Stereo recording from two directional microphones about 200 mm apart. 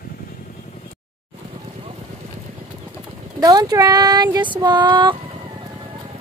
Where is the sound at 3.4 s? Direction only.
20° right (ahead or behind).